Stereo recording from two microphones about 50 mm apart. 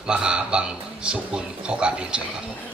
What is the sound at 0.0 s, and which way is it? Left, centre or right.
A man's voice, centre.